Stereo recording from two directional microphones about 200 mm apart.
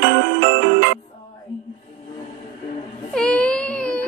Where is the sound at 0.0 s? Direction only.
60° right (ahead or behind).